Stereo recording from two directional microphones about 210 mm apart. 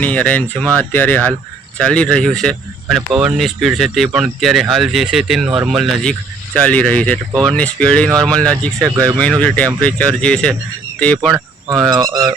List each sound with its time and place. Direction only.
0.0 s speech: 5° left (ahead or behind)
11.9 s speech: 20° right (ahead or behind)